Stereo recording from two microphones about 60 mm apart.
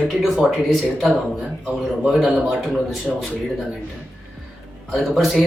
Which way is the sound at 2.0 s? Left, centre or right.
Centre.